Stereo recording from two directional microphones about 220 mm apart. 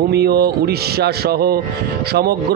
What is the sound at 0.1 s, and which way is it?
A man's voice, 45° right (ahead or behind).